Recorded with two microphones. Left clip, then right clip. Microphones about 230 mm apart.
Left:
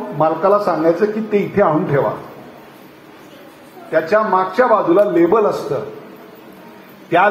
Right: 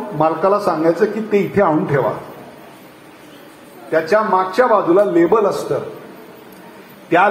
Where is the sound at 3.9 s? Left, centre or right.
Right.